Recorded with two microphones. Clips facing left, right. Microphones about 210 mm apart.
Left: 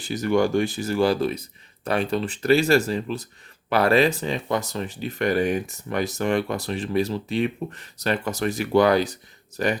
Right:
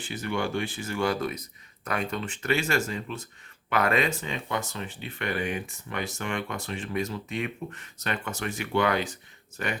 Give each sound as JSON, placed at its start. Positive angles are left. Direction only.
{"t": 0.0, "sound": "speech", "side_deg": 40}